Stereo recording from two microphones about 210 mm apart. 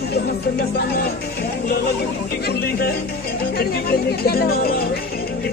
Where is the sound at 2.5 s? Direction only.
50° left (ahead or behind).